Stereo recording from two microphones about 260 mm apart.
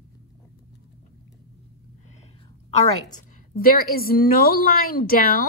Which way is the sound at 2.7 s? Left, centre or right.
Left.